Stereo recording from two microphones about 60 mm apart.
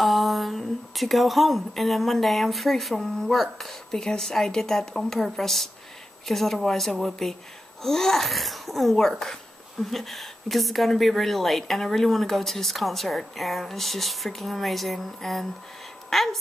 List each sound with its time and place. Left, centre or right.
0.0 s speech: centre